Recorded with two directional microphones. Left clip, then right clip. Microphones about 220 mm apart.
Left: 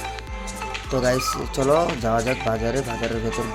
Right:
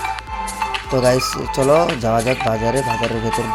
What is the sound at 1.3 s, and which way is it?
Sizzle, 20° right (ahead or behind).